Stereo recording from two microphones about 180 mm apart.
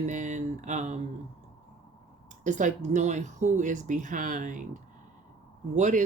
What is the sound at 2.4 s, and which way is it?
Speech, 45° right (ahead or behind).